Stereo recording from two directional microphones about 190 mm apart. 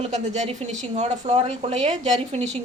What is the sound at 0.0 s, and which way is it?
A woman's voice, 35° right (ahead or behind).